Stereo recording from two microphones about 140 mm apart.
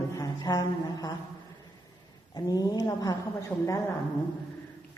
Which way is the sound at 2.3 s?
25° left (ahead or behind).